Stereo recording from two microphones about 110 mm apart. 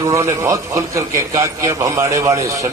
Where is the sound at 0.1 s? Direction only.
25° right (ahead or behind).